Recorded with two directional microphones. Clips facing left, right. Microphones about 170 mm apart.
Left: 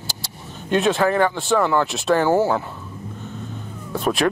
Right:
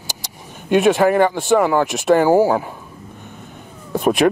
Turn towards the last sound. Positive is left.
turn(degrees=-20)  # may be behind; listen again after turning